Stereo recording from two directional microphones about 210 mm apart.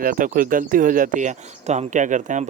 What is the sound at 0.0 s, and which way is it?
Speech, 40° right (ahead or behind).